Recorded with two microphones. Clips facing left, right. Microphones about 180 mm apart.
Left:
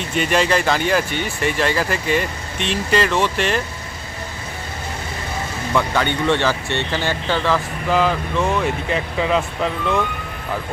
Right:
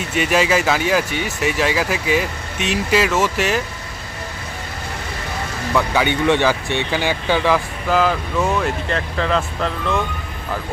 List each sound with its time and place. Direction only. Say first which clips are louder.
0.0 s speech: right 1 dB; 5° right (ahead or behind)
5.7 s speech: right 1 dB; 10° right (ahead or behind)